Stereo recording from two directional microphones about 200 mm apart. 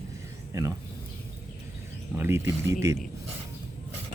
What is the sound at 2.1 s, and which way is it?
Speech, 10° right (ahead or behind).